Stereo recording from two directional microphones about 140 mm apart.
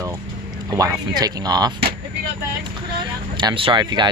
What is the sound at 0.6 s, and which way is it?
Speech, 25° right (ahead or behind).